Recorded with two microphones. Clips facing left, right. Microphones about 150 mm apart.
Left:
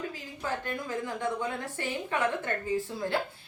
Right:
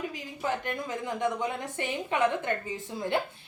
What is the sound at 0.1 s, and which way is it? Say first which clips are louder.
A woman's voice: right 3 dB; 15° right (ahead or behind).